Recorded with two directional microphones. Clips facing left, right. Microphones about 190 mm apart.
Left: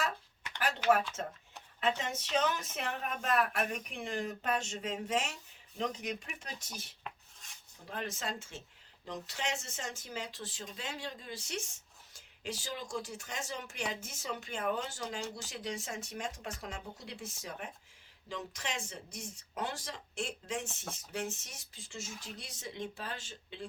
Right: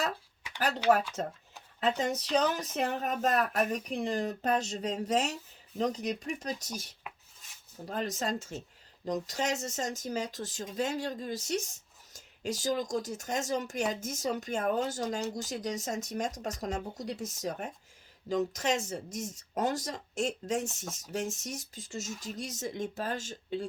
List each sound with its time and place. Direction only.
0.6 s speech: 35° right (ahead or behind)
7.0 s rub: 5° right (ahead or behind)
7.9 s speech: 40° right (ahead or behind)